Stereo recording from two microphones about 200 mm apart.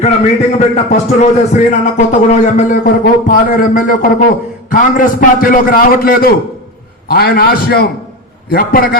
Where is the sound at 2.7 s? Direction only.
45° left (ahead or behind).